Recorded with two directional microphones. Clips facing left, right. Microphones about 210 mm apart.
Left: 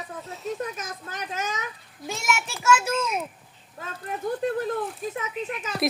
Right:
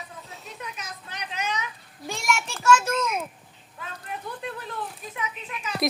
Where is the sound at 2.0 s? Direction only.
Centre (ahead or behind).